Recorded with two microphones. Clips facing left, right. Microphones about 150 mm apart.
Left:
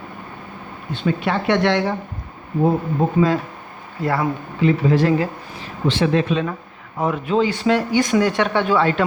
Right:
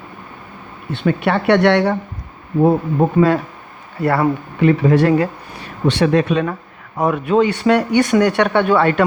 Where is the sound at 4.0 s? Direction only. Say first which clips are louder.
Right 5 dB; 65° right (ahead or behind).